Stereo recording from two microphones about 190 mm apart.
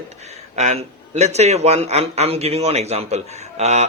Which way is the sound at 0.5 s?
35° right (ahead or behind).